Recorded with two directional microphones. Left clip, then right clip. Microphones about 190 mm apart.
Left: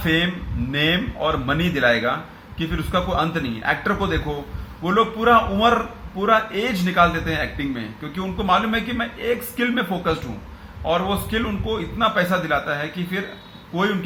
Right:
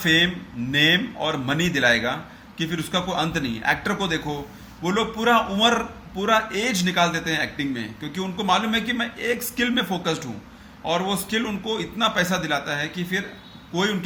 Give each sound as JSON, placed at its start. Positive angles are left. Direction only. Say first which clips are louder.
{"t": 0.0, "sound": "a man's voice", "louder": "right 2 dB", "side_deg": -10}